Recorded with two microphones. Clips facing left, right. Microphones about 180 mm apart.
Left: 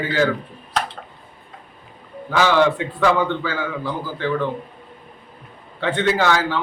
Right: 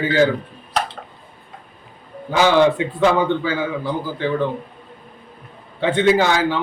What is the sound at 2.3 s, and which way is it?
A man's voice, 20° right (ahead or behind).